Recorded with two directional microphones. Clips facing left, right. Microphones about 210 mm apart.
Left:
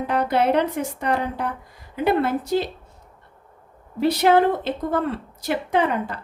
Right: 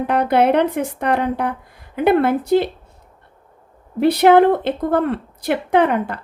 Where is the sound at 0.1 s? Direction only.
60° right (ahead or behind).